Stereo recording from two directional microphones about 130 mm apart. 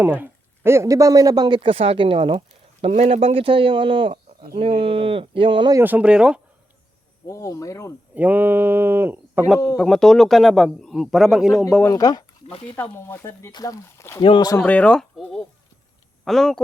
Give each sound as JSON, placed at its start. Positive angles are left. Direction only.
{"t": 0.0, "sound": "speech", "side_deg": -15}
{"t": 2.8, "sound": "speech", "side_deg": -50}
{"t": 5.7, "sound": "speech", "side_deg": -15}
{"t": 7.3, "sound": "speech", "side_deg": 25}
{"t": 8.1, "sound": "speech", "side_deg": -15}
{"t": 9.7, "sound": "a man's voice", "side_deg": 5}
{"t": 11.8, "sound": "speech", "side_deg": 25}
{"t": 12.7, "sound": "speech", "side_deg": 15}
{"t": 13.5, "sound": "speech", "side_deg": 30}
{"t": 14.2, "sound": "speech", "side_deg": 40}
{"t": 14.5, "sound": "speech", "side_deg": 15}